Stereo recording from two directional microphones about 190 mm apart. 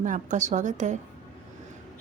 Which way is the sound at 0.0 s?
40° right (ahead or behind).